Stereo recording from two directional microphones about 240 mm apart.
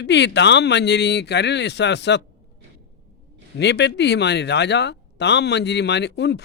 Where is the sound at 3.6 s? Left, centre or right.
Left.